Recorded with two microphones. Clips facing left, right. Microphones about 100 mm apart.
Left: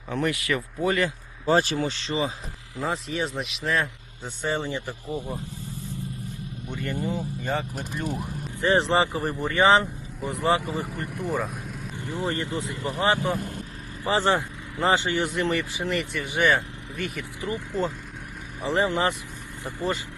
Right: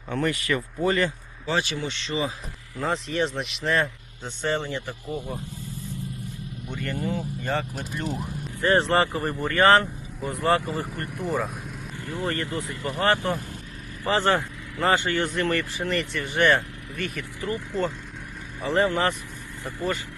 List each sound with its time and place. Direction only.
0.1 s speech: 5° left (ahead or behind)
1.5 s speech: 40° left (ahead or behind)
2.8 s speech: 5° left (ahead or behind)
4.4 s speech: 15° left (ahead or behind)
6.7 s speech: 20° left (ahead or behind)
7.8 s speech: centre (ahead or behind)
9.4 s speech: 15° left (ahead or behind)
10.4 s speech: 5° left (ahead or behind)
12.0 s speech: 20° left (ahead or behind)